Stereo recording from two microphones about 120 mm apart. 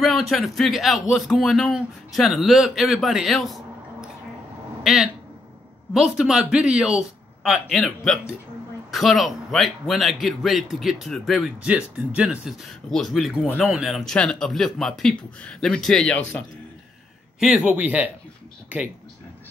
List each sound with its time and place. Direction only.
0.0 s speech: centre (ahead or behind)
17.4 s speech: 10° right (ahead or behind)